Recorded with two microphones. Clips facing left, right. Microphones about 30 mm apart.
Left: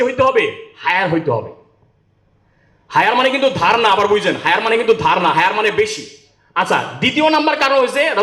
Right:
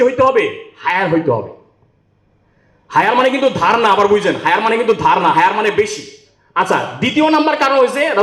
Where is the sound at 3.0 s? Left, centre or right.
Centre.